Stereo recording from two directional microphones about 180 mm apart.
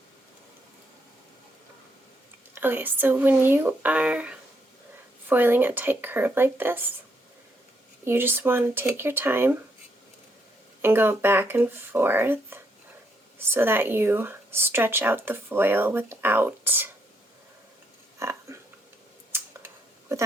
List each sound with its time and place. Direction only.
2.6 s speech: 10° right (ahead or behind)
8.0 s speech: 10° right (ahead or behind)
10.8 s speech: 15° right (ahead or behind)
18.2 s a sound: 15° right (ahead or behind)
19.3 s scissors: 15° right (ahead or behind)